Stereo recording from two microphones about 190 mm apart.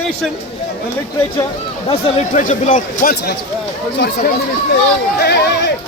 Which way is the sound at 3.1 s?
60° left (ahead or behind).